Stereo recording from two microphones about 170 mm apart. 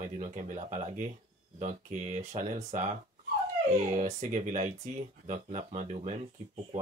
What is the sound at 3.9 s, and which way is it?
Speech, 45° right (ahead or behind).